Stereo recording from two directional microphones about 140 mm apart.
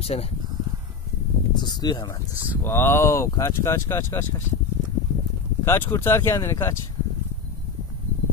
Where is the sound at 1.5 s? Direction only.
30° left (ahead or behind).